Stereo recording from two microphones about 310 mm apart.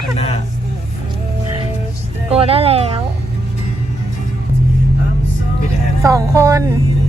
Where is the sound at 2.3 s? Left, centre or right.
Centre.